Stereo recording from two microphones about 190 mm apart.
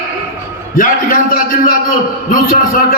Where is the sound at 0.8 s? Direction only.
45° left (ahead or behind).